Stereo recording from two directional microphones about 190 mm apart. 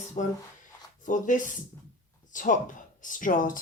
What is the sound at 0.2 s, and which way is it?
Speech, 35° left (ahead or behind).